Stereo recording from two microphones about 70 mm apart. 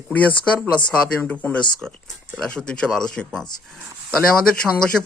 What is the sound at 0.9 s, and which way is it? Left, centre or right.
Speech, centre.